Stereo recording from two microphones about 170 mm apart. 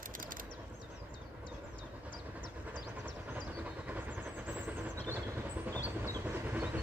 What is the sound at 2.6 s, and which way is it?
Train, 10° right (ahead or behind).